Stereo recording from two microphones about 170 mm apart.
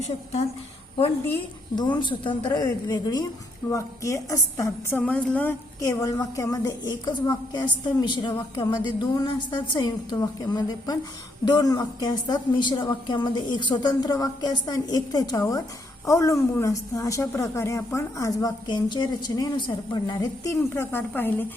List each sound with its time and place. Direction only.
1.7 s a woman's voice: 25° left (ahead or behind); by 5.9 s 10° left (ahead or behind)
5.9 s a woman's voice: 20° left (ahead or behind)